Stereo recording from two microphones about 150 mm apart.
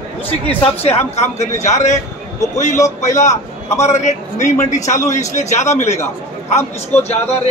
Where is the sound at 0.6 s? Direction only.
45° left (ahead or behind).